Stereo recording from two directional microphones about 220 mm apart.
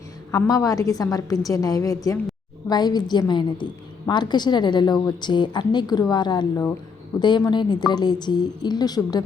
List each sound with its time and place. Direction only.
0.3 s a woman's voice: 15° left (ahead or behind)